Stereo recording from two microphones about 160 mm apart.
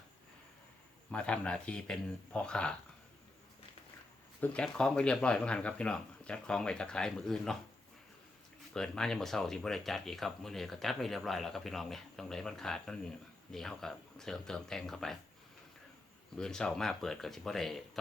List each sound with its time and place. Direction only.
1.1 s speech: 5° left (ahead or behind)
4.4 s speech: 10° left (ahead or behind)
8.7 s speech: 5° left (ahead or behind)
16.4 s speech: 5° left (ahead or behind)